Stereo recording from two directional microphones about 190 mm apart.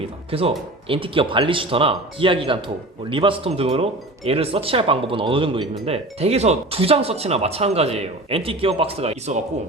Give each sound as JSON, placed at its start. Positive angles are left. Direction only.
{"t": 0.3, "sound": "speech", "side_deg": -30}